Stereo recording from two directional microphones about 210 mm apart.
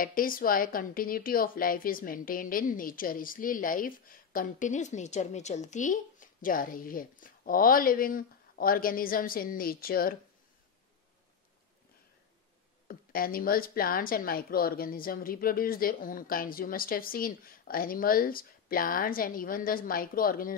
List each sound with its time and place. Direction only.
0.0 s a woman's voice: 40° left (ahead or behind)
12.8 s a woman's voice: 45° left (ahead or behind)